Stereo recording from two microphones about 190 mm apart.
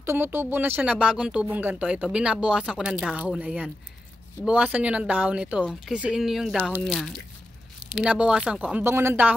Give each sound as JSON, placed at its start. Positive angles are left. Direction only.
{"t": 0.0, "sound": "speech", "side_deg": -10}